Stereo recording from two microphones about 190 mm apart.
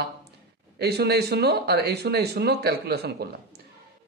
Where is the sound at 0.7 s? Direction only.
60° right (ahead or behind).